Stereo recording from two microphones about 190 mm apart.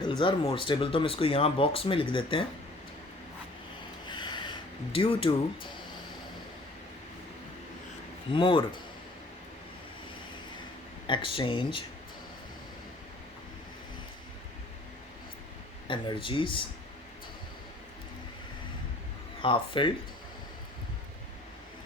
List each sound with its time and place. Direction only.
0.1 s speech: 25° left (ahead or behind)
4.1 s a sound: 25° left (ahead or behind)
8.3 s speech: 25° left (ahead or behind)
11.0 s speech: 25° left (ahead or behind)
15.9 s speech: 25° left (ahead or behind)
19.4 s speech: 25° left (ahead or behind)